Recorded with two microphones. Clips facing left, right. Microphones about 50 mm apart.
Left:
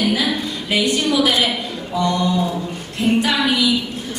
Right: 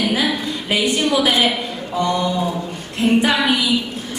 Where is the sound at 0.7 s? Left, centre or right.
Right.